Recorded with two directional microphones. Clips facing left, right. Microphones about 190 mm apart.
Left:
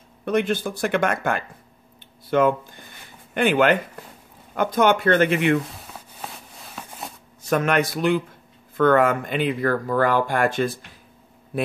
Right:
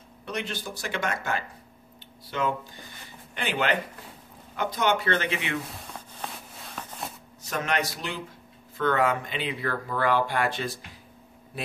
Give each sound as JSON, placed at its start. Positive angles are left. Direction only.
{"t": 0.2, "sound": "speech", "side_deg": 55}
{"t": 5.7, "sound": "a sound", "side_deg": 5}
{"t": 7.4, "sound": "speech", "side_deg": 55}